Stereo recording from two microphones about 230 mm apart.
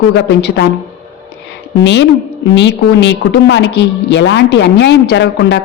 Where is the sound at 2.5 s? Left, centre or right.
Left.